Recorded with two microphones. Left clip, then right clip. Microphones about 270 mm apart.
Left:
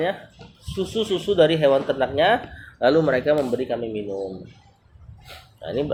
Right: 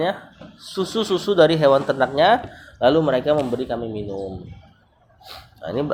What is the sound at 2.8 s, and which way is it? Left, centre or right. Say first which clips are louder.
Speech: right 1 dB; right.